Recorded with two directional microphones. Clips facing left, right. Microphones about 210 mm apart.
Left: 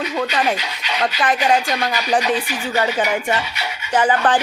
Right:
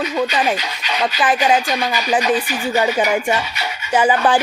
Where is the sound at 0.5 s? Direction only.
40° right (ahead or behind).